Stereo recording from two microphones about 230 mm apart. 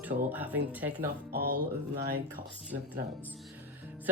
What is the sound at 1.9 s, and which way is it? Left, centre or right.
Speech, right.